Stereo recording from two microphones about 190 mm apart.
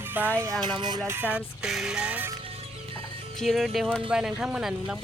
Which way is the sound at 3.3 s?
Centre (ahead or behind).